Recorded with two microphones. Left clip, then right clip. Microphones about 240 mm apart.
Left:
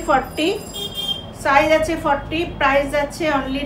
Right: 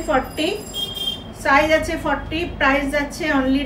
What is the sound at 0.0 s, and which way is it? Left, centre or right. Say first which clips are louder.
A woman's voice: left 2 dB; centre.